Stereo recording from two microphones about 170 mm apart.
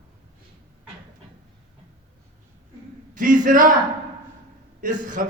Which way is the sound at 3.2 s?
50° right (ahead or behind).